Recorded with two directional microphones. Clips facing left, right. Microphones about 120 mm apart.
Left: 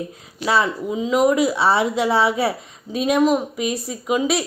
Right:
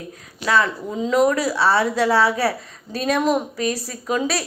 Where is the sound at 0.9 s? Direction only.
5° left (ahead or behind).